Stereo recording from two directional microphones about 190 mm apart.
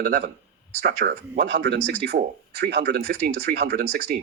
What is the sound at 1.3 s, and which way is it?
Speech, 65° right (ahead or behind).